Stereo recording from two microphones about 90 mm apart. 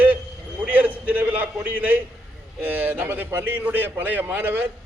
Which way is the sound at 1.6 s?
20° right (ahead or behind).